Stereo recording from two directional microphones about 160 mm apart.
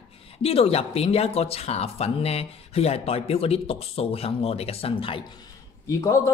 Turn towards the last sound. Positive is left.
turn(degrees=20)  # may be behind; listen again after turning